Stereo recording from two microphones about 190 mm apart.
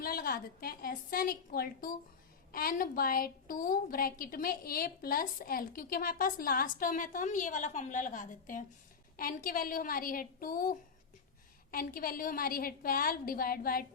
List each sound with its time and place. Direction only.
0.0 s a woman's voice: 50° left (ahead or behind)